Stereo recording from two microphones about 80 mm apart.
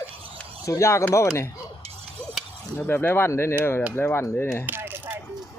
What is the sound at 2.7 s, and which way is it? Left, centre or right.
Speech, left.